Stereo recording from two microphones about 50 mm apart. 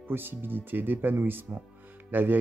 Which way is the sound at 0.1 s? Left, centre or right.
Right.